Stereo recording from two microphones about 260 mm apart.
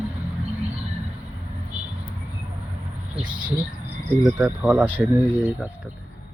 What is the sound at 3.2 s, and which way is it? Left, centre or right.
Speech, centre.